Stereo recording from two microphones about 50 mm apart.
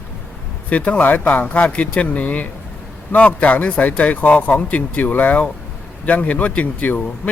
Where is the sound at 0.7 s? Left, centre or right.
Left.